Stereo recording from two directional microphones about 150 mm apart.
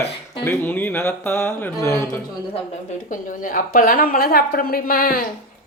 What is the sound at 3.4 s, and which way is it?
A woman's voice, 65° left (ahead or behind).